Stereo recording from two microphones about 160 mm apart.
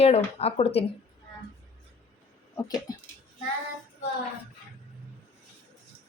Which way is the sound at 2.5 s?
20° left (ahead or behind).